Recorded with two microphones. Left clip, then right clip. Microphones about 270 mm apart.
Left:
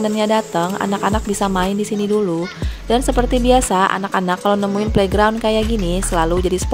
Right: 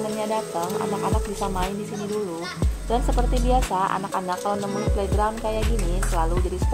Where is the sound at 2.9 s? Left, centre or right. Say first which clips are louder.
Left 9 dB; left.